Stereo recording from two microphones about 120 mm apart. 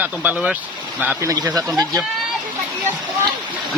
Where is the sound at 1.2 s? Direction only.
25° right (ahead or behind).